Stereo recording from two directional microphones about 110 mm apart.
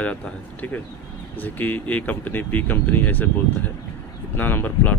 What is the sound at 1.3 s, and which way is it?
Speech, 15° left (ahead or behind).